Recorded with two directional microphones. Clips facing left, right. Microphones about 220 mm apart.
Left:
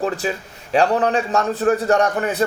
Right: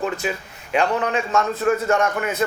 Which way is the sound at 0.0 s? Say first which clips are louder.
Left 2 dB; 35° left (ahead or behind).